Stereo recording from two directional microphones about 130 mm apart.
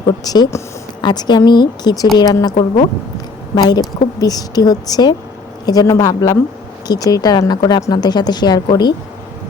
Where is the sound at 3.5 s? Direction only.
30° left (ahead or behind).